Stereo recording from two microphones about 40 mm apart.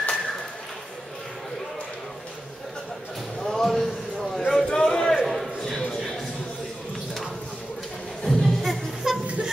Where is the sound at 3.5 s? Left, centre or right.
Centre.